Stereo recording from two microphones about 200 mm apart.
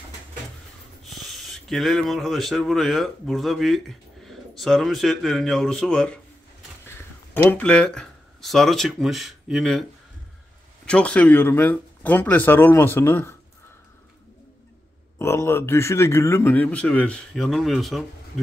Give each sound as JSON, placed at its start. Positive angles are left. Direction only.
{"t": 1.0, "sound": "speech", "side_deg": 0}
{"t": 7.4, "sound": "speech", "side_deg": 5}
{"t": 10.9, "sound": "a man's voice", "side_deg": 5}
{"t": 15.1, "sound": "a man's voice", "side_deg": 10}